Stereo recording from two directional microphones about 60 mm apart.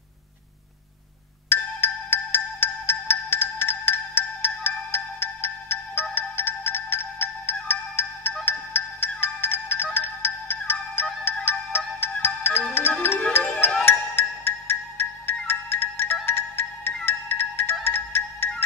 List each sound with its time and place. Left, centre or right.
1.5 s marimba: left
8.5 s music: left
16.3 s marimba: left